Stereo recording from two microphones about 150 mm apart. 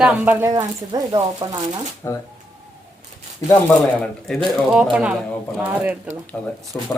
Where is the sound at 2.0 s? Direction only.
20° left (ahead or behind).